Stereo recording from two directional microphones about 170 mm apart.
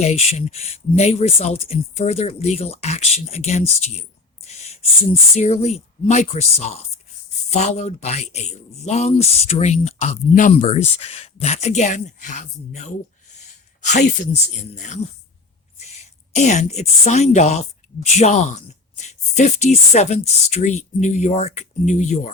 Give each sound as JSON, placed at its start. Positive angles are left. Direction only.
{"t": 0.0, "sound": "speech", "side_deg": 40}
{"t": 4.4, "sound": "a sound", "side_deg": 40}
{"t": 5.4, "sound": "speech", "side_deg": 40}
{"t": 16.0, "sound": "speech", "side_deg": 40}